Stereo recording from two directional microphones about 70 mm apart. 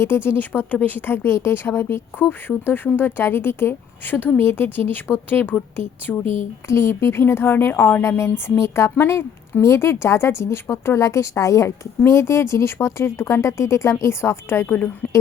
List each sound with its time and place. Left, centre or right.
0.0 s a woman's voice: left
6.7 s a woman's voice: left